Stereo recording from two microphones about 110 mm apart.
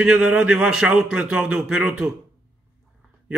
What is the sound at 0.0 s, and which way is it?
A man's voice, 5° right (ahead or behind).